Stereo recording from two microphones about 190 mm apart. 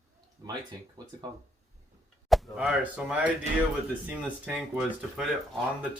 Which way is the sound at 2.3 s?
Centre (ahead or behind).